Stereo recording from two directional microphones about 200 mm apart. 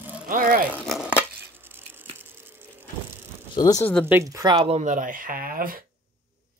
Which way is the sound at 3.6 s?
20° left (ahead or behind).